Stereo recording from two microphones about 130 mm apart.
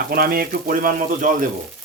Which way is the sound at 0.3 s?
90° right.